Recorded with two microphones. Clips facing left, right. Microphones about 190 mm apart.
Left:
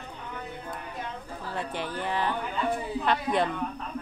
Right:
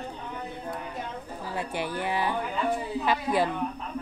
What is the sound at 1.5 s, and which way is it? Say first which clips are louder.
Speech: right 2 dB; 10° right (ahead or behind).